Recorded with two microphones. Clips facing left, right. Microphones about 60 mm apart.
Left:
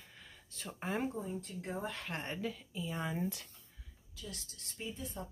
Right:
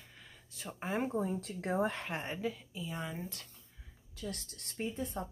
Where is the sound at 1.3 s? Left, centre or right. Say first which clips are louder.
Right 6 dB; right.